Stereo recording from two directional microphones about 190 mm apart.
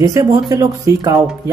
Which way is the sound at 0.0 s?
20° right (ahead or behind).